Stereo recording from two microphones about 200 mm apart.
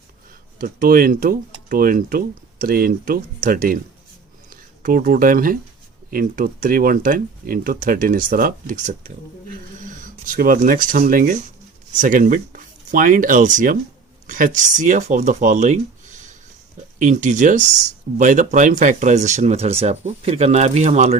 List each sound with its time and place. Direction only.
0.6 s speech: 45° right (ahead or behind)